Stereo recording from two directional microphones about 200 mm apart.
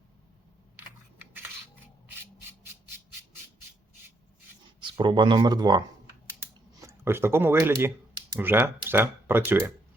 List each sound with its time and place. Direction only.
4.8 s speech: 25° right (ahead or behind)